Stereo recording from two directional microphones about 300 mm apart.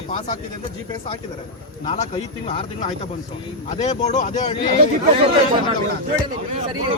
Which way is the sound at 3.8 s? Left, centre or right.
Left.